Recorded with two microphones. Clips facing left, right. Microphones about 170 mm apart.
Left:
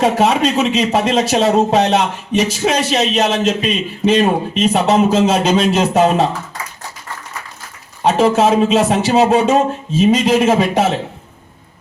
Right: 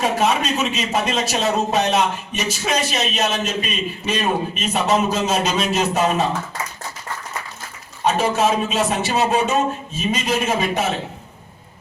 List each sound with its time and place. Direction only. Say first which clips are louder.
0.0 s speech: left 6 dB; 65° left (ahead or behind)
8.0 s speech: left 6 dB; 70° left (ahead or behind)